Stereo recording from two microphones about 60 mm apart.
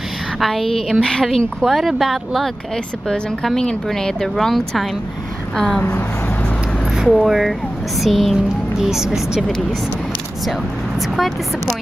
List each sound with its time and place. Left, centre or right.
0.4 s speech: centre
1.6 s speech: centre
3.1 s speech: centre
7.0 s speech: centre
11.0 s speech: centre